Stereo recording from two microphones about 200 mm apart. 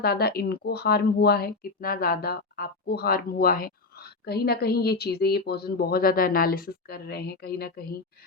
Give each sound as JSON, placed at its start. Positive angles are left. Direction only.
{"t": 0.0, "sound": "speech", "side_deg": 50}